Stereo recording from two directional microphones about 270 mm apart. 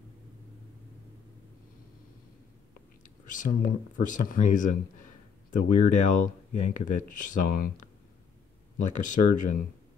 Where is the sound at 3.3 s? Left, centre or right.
Left.